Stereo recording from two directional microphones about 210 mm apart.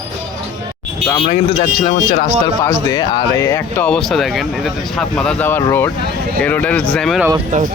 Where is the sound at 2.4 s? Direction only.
15° left (ahead or behind).